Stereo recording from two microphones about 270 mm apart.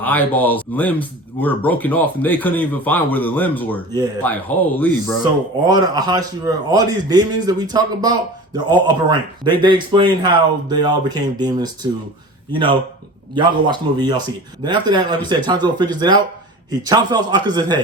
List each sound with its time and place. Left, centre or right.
0.0 s a man's voice: centre
5.6 s speech: centre
13.3 s speech: centre